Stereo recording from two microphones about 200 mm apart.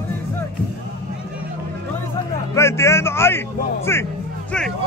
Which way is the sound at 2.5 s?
15° left (ahead or behind).